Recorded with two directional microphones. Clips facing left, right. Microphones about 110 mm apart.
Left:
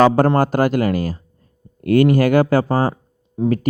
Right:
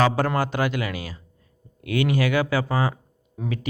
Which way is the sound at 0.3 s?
45° left (ahead or behind).